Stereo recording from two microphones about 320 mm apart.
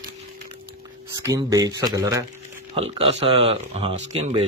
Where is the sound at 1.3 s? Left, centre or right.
Centre.